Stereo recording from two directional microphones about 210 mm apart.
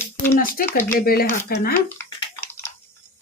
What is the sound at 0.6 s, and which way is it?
Speech, 45° left (ahead or behind).